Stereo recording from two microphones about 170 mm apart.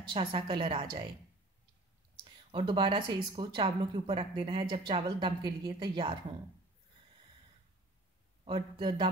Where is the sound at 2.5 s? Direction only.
30° right (ahead or behind).